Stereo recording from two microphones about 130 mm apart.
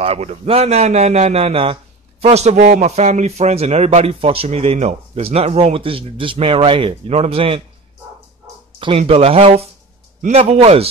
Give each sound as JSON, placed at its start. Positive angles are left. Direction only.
{"t": 0.0, "sound": "a man's voice", "side_deg": -55}
{"t": 8.7, "sound": "a man's voice", "side_deg": -45}